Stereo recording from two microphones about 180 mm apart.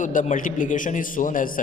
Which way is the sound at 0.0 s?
45° left (ahead or behind).